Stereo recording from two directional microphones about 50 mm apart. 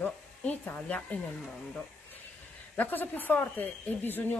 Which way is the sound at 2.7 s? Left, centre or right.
Left.